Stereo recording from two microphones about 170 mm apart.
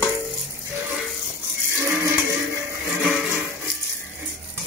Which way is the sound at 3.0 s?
10° right (ahead or behind).